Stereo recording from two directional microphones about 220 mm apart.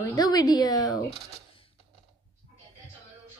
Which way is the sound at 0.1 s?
15° left (ahead or behind).